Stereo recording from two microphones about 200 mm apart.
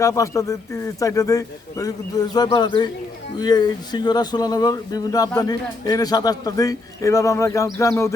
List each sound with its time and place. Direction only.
0.0 s a man's voice: 15° left (ahead or behind)